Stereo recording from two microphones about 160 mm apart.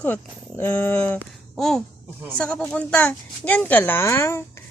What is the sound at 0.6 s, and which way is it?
Speech, 10° left (ahead or behind).